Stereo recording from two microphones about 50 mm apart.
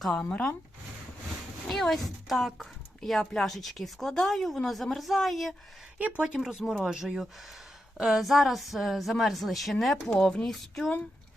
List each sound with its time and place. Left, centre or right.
0.1 s speech: centre
1.6 s a woman's voice: centre
3.0 s a woman's voice: centre
6.0 s speech: right
6.2 s a woman's voice: centre
10.2 s a woman's voice: centre
10.4 s speech: centre